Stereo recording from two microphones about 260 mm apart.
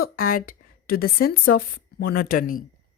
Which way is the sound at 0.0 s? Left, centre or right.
Left.